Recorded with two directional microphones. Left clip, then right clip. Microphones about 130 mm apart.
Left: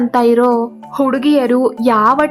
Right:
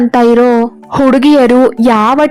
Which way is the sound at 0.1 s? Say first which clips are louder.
Right 3 dB; 45° right (ahead or behind).